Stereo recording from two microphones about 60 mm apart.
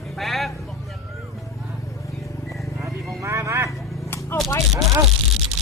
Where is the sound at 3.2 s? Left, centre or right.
Right.